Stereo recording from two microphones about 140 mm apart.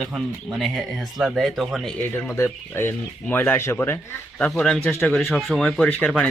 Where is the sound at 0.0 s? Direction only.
Centre (ahead or behind).